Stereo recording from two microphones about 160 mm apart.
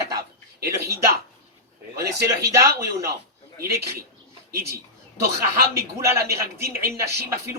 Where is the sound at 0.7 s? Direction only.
20° right (ahead or behind).